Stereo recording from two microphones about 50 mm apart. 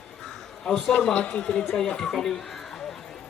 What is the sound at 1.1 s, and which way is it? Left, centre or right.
Speech, left.